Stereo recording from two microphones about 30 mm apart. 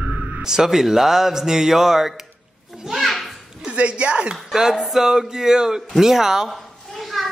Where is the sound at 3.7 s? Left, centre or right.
Right.